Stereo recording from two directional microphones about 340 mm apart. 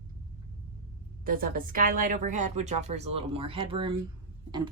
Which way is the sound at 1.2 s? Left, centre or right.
Right.